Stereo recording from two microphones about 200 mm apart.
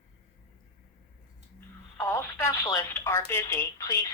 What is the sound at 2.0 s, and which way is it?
Speech, 15° left (ahead or behind).